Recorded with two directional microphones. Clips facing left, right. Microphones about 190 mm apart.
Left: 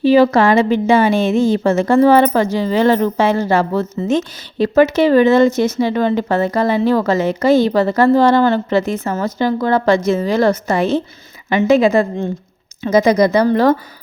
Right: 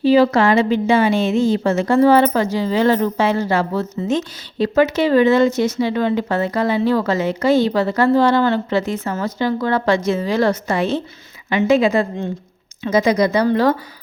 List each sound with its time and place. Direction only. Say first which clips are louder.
0.2 s speech: left 2 dB; 50° left (ahead or behind)